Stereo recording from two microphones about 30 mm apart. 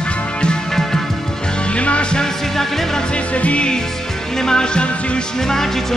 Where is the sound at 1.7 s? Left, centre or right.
Left.